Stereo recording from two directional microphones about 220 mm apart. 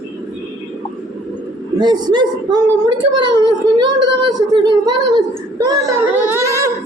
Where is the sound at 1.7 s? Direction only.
20° right (ahead or behind).